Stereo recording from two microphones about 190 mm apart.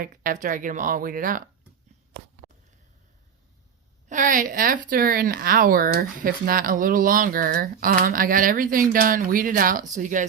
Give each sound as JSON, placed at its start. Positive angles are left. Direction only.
{"t": 0.0, "sound": "speech", "side_deg": -50}
{"t": 4.1, "sound": "speech", "side_deg": -45}